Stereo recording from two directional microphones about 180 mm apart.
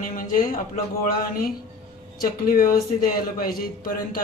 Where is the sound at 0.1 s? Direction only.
50° left (ahead or behind).